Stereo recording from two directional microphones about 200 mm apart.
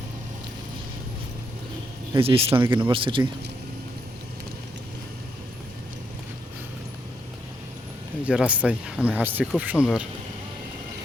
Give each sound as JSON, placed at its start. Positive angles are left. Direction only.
{"t": 2.1, "sound": "speech", "side_deg": -30}
{"t": 2.6, "sound": "speech", "side_deg": -10}
{"t": 2.9, "sound": "speech", "side_deg": -25}
{"t": 8.2, "sound": "speech", "side_deg": -5}